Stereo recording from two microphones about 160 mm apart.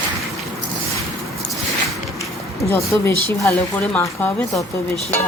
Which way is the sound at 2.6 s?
20° left (ahead or behind).